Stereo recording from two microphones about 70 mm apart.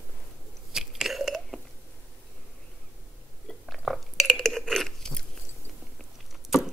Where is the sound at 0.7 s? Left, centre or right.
Centre.